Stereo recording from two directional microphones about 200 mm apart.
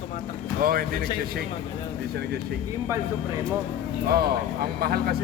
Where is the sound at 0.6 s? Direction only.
45° right (ahead or behind).